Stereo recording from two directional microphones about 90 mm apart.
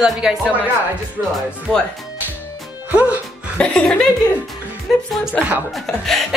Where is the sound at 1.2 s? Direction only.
35° right (ahead or behind).